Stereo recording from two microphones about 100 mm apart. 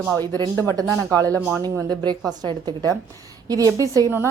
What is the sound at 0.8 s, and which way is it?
Speech, 35° right (ahead or behind).